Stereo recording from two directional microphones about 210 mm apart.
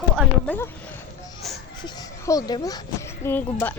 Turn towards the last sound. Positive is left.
turn(degrees=10)  # may be behind; listen again after turning